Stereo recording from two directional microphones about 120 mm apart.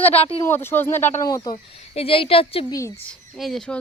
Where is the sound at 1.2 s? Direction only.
35° left (ahead or behind).